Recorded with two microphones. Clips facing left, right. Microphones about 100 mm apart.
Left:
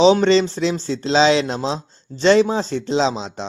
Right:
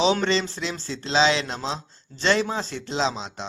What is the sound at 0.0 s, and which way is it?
Speech, 25° left (ahead or behind).